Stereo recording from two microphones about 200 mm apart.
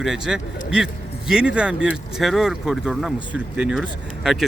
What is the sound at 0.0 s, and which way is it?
Speech, centre (ahead or behind).